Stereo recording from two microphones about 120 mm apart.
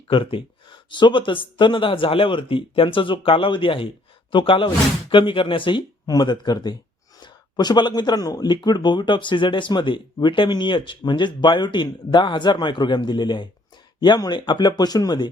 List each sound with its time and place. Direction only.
0.1 s speech: 45° left (ahead or behind)